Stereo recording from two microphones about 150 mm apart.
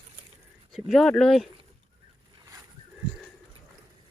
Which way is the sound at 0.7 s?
Centre (ahead or behind).